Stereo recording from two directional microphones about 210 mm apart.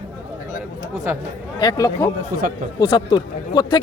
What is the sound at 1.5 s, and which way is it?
Speech, 15° left (ahead or behind).